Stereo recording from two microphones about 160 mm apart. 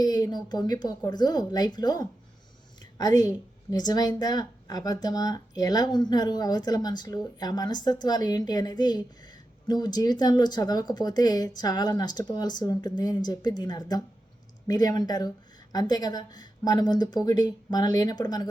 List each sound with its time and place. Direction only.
0.0 s a woman's voice: 25° left (ahead or behind)